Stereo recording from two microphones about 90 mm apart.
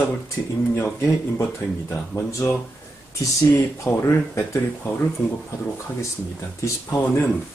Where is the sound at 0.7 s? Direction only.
25° left (ahead or behind).